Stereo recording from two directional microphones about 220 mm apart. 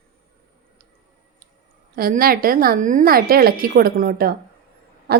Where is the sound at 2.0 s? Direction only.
40° right (ahead or behind).